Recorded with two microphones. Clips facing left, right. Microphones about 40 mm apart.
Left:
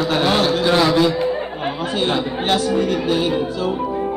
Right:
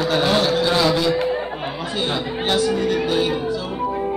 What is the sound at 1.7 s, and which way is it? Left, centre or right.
A man's voice, left.